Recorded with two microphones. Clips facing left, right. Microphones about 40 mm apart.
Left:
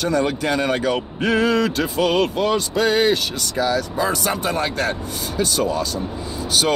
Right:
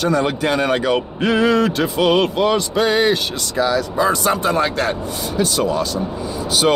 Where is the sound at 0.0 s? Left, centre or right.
Right.